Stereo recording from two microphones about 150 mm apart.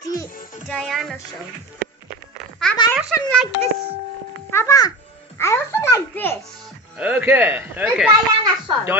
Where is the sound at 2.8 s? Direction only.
30° left (ahead or behind).